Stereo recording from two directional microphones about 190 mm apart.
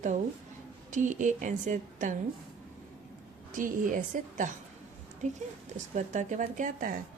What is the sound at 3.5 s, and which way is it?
A woman's voice, 45° right (ahead or behind).